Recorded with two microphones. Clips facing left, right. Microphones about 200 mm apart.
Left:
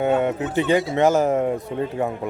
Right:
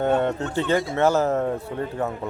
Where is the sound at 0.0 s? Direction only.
10° left (ahead or behind).